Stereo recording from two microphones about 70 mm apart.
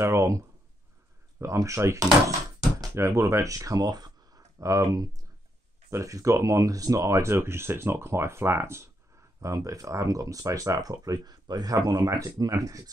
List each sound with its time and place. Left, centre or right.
0.0 s speech: right
1.4 s speech: right
5.9 s speech: right
9.4 s speech: right